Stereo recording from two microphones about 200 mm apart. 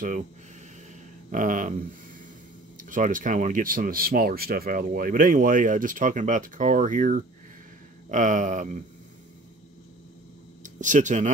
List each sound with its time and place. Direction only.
1.3 s speech: 40° right (ahead or behind)
2.8 s speech: 40° right (ahead or behind)
10.6 s speech: 40° right (ahead or behind)